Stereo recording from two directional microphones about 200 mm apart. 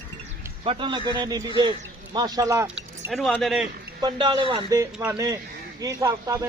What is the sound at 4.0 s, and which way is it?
A man's voice, 20° right (ahead or behind).